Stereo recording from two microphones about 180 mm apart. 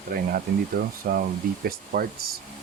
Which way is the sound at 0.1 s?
55° right (ahead or behind).